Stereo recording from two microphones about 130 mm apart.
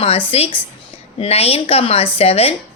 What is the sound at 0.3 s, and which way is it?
A woman's voice, 45° left (ahead or behind).